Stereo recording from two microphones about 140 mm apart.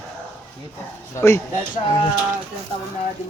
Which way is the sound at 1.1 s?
20° left (ahead or behind).